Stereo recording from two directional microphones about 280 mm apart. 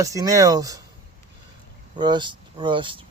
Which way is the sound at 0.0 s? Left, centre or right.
Centre.